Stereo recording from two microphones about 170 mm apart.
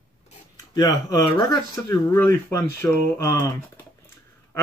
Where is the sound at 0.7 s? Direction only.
20° left (ahead or behind).